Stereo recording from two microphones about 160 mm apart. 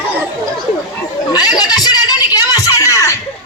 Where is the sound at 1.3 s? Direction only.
25° left (ahead or behind).